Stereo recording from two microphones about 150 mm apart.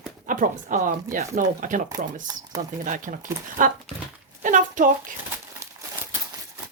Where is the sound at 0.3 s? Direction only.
60° right (ahead or behind).